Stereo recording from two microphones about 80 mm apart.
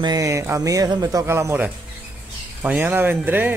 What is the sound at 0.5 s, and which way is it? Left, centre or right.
Speech, right.